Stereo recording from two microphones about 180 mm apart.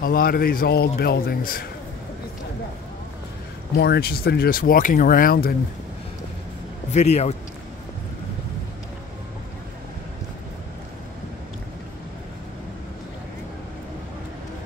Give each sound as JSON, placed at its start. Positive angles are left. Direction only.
{"t": 0.0, "sound": "speech", "side_deg": 55}
{"t": 3.7, "sound": "speech", "side_deg": 60}
{"t": 6.9, "sound": "speech", "side_deg": 40}